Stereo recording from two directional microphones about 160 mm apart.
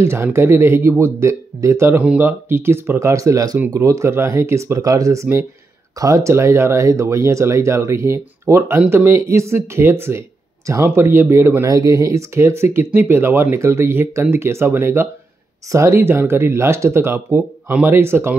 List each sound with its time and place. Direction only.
0.0 s speech: 15° right (ahead or behind)